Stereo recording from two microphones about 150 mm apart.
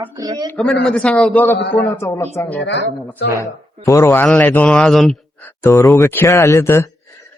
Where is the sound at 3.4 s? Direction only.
20° left (ahead or behind).